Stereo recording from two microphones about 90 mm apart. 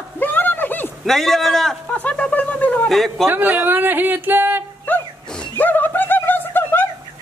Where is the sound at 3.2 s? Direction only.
20° right (ahead or behind).